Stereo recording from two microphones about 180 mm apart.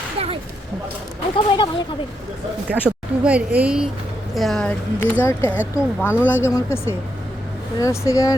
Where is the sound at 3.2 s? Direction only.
5° right (ahead or behind); by 8.4 s 20° left (ahead or behind).